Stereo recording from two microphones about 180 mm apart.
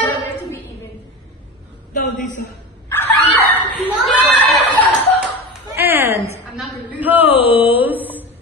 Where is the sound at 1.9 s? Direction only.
45° left (ahead or behind).